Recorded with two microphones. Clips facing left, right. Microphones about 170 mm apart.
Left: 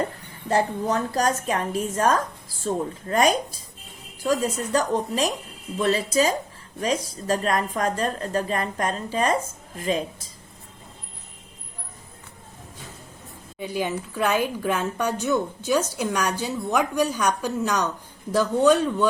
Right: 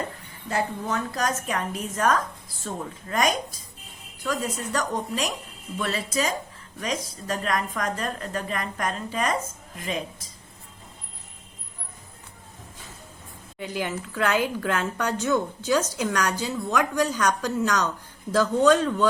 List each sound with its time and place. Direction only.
0.4 s a woman's voice: 35° left (ahead or behind)
13.6 s speech: 15° left (ahead or behind)
16.4 s speech: 15° left (ahead or behind)